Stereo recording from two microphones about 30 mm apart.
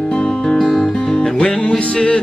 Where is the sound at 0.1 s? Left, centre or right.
Left.